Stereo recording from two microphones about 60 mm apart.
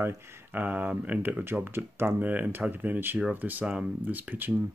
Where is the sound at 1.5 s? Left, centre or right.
Right.